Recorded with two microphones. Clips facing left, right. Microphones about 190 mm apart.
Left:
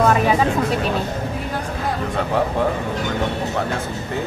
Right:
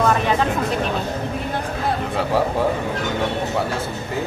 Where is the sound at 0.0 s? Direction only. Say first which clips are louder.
Left 2 dB; 5° left (ahead or behind).